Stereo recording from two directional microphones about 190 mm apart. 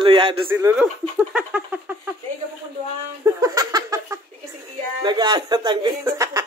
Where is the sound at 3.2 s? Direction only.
20° right (ahead or behind).